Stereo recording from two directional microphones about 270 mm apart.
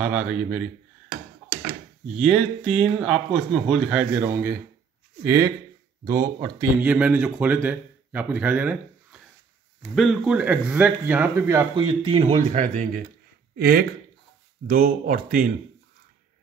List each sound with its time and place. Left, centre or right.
0.0 s speech: centre
2.1 s speech: centre; by 15.5 s right